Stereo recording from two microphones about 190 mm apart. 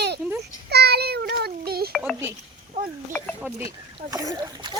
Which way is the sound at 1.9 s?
Centre (ahead or behind).